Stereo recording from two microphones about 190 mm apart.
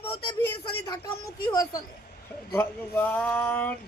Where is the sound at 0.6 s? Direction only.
20° left (ahead or behind).